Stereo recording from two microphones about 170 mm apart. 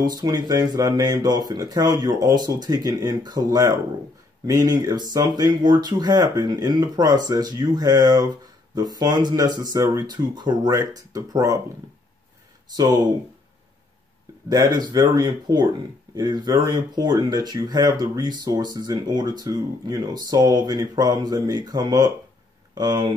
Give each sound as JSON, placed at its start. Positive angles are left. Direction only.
{"t": 0.0, "sound": "speech", "side_deg": -25}
{"t": 12.7, "sound": "speech", "side_deg": -20}
{"t": 14.5, "sound": "speech", "side_deg": -20}